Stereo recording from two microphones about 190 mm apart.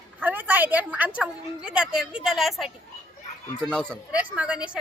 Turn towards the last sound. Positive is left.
turn(degrees=-5)  # may be behind; listen again after turning